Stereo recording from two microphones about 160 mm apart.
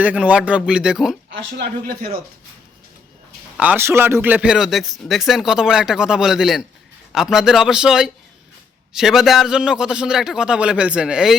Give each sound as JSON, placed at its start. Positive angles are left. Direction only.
{"t": 0.0, "sound": "speech", "side_deg": -10}
{"t": 1.3, "sound": "speech", "side_deg": -75}
{"t": 3.6, "sound": "a man's voice", "side_deg": -10}